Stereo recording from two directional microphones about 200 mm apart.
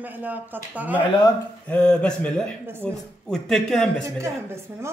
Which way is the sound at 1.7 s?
5° left (ahead or behind).